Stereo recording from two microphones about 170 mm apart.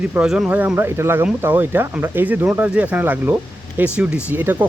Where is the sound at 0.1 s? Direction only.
5° right (ahead or behind).